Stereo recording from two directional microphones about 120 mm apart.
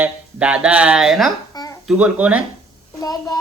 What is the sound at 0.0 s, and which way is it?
Speech, 10° right (ahead or behind).